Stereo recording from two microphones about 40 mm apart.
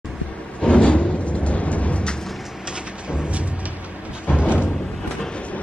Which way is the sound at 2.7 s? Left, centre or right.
Right.